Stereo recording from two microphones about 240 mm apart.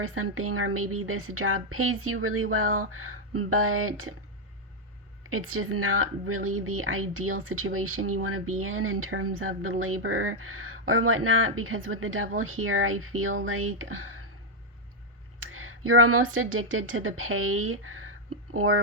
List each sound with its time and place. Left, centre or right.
0.1 s a woman's voice: right
5.3 s a woman's voice: right
15.4 s a woman's voice: right